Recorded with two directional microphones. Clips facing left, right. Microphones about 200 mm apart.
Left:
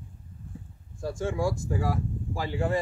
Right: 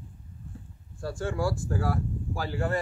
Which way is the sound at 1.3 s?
10° left (ahead or behind).